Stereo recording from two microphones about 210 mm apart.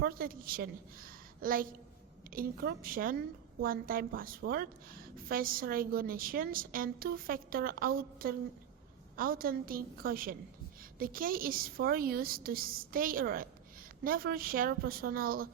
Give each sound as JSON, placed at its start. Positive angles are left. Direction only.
{"t": 0.0, "sound": "a woman's voice", "side_deg": -45}